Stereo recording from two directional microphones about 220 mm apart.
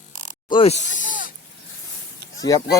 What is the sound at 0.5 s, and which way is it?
Snake, 25° left (ahead or behind).